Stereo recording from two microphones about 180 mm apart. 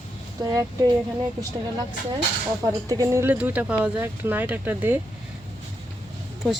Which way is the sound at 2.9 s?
15° right (ahead or behind).